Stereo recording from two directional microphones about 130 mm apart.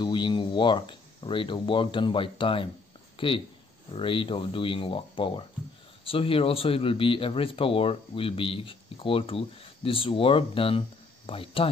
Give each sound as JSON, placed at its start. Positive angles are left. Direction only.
{"t": 0.0, "sound": "speech", "side_deg": 40}